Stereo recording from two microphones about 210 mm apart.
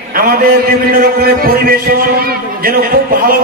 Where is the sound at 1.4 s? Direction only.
45° right (ahead or behind).